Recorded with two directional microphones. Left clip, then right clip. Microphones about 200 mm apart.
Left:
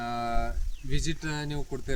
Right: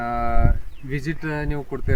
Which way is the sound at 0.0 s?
5° left (ahead or behind).